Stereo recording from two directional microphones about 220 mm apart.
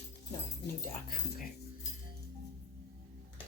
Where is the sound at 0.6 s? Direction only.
40° left (ahead or behind).